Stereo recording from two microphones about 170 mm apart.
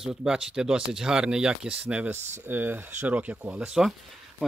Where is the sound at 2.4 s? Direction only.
10° right (ahead or behind).